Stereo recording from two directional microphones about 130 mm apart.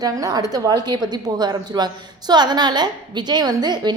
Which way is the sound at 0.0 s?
30° right (ahead or behind).